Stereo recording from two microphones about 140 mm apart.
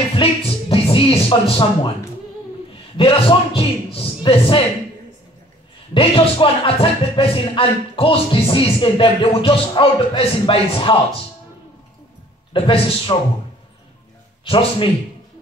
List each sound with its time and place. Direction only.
0.1 s music: 40° left (ahead or behind)
3.0 s speech: 40° left (ahead or behind)
5.9 s speech: 40° left (ahead or behind)
12.5 s speech: 40° left (ahead or behind)
14.4 s speech: 40° left (ahead or behind)